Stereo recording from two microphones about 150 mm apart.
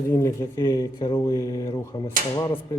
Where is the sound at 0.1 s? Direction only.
20° left (ahead or behind).